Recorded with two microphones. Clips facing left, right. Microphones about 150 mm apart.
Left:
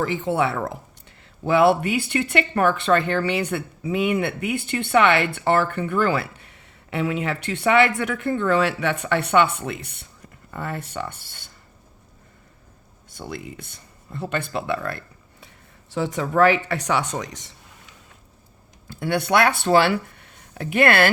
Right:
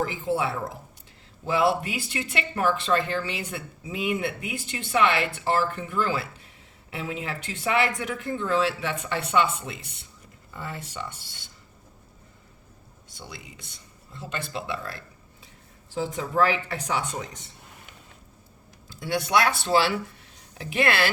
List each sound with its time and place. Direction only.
0.0 s speech: 80° left; by 11.5 s 55° left (ahead or behind)
13.1 s speech: 55° left (ahead or behind)
15.9 s speech: 75° left (ahead or behind)
18.9 s speech: 60° left (ahead or behind)